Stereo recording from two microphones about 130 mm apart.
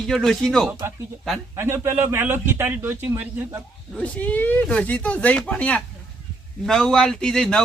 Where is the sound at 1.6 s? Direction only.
20° right (ahead or behind).